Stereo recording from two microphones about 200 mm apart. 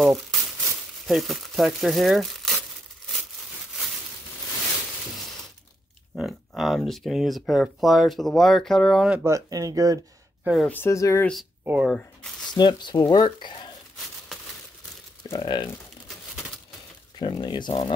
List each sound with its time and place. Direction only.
0.0 s crumpling: centre (ahead or behind)
1.0 s speech: centre (ahead or behind)
6.1 s speech: centre (ahead or behind)
9.2 s speech: 15° right (ahead or behind)
10.4 s speech: centre (ahead or behind)
10.7 s speech: 15° left (ahead or behind)
11.6 s speech: 10° right (ahead or behind)
12.5 s speech: 20° left (ahead or behind)
15.3 s speech: 25° left (ahead or behind)
17.2 s speech: 20° left (ahead or behind)